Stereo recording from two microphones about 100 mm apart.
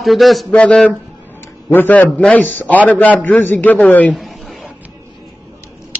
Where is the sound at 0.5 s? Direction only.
10° left (ahead or behind).